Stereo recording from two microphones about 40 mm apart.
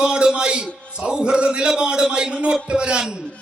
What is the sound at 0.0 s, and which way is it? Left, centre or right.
Music, right.